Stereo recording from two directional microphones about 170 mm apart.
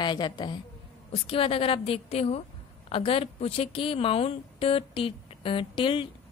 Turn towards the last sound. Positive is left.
turn(degrees=30)  # may be behind; listen again after turning